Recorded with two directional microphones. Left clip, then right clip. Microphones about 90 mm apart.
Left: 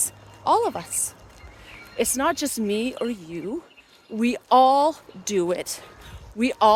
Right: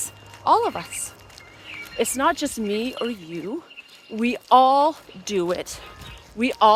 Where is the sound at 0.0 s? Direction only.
35° left (ahead or behind).